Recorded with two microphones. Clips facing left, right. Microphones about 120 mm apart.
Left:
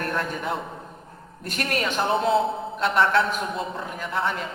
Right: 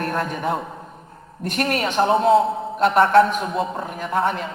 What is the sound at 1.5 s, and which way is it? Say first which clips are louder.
A man's voice: right 5 dB; 40° right (ahead or behind).